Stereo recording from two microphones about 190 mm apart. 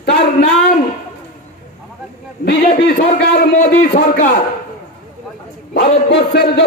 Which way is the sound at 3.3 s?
50° left (ahead or behind).